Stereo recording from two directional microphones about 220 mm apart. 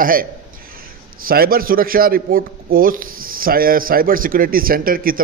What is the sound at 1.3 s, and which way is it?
A man's voice, 40° right (ahead or behind).